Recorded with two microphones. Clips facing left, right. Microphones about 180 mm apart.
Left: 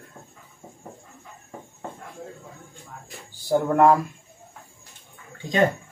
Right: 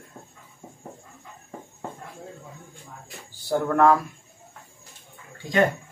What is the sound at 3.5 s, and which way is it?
Speech, 20° left (ahead or behind).